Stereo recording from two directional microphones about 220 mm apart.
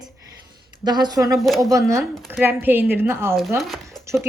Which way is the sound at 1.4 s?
Centre (ahead or behind).